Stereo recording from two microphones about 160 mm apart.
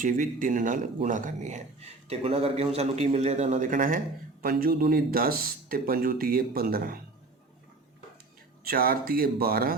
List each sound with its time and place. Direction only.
0.0 s a man's voice: 60° right (ahead or behind)
8.6 s speech: 70° right (ahead or behind)